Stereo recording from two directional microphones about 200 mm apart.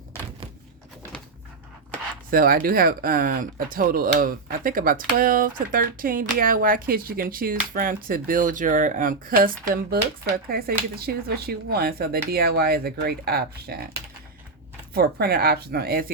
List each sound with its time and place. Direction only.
2.3 s speech: 45° right (ahead or behind)
14.9 s speech: 50° right (ahead or behind)